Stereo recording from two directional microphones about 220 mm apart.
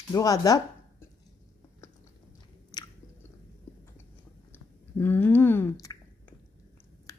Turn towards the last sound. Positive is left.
turn(degrees=15)  # may be behind; listen again after turning